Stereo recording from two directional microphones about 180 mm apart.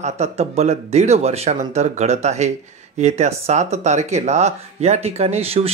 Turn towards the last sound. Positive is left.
turn(degrees=-35)  # may be behind; listen again after turning